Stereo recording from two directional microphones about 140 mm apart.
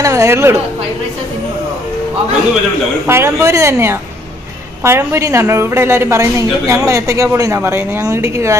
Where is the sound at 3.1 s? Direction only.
20° right (ahead or behind).